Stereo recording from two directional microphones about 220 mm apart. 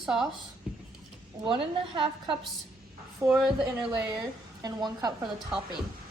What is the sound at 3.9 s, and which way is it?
A woman's voice, 15° right (ahead or behind).